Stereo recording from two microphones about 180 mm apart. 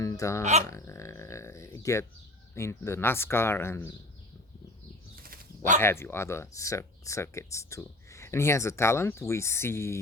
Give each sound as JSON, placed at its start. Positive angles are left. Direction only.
{"t": 0.0, "sound": "speech", "side_deg": 20}
{"t": 0.7, "sound": "a sound", "side_deg": 15}
{"t": 2.6, "sound": "speech", "side_deg": 15}
{"t": 5.1, "sound": "dog", "side_deg": -55}
{"t": 5.8, "sound": "speech", "side_deg": 15}